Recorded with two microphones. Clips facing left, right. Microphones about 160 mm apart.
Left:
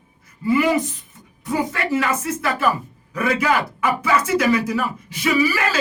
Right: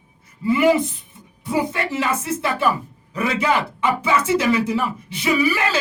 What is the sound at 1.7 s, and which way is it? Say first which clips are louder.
Speech: left 1 dB; 25° right (ahead or behind).